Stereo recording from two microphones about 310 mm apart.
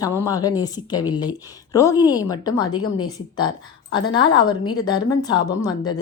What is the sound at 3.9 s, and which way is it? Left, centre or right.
A woman's voice, centre.